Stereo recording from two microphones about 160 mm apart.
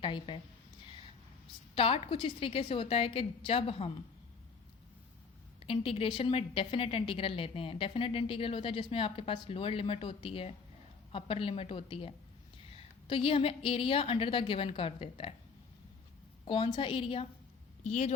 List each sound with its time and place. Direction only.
0.0 s a woman's voice: 30° left (ahead or behind)
1.7 s a woman's voice: 35° left (ahead or behind)
5.5 s a woman's voice: 35° left (ahead or behind)
16.5 s a woman's voice: 30° left (ahead or behind)